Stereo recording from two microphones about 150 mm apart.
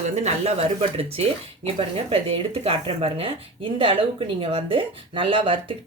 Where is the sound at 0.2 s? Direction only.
45° right (ahead or behind).